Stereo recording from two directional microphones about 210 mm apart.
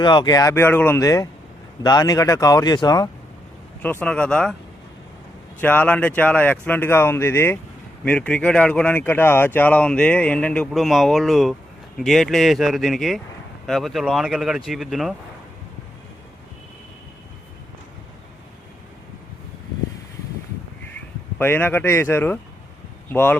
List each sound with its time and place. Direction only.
0.0 s speech: 20° left (ahead or behind)
3.8 s speech: 5° left (ahead or behind)
5.5 s speech: 10° left (ahead or behind)
21.3 s speech: 10° left (ahead or behind)